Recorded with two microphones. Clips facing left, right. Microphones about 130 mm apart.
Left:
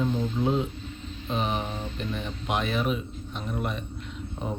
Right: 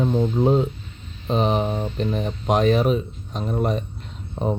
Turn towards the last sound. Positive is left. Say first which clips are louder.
# right 8 dB
turn(degrees=-35)  # may be behind; listen again after turning